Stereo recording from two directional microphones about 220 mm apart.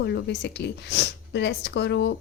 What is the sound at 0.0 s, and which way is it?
Speech, 50° left (ahead or behind).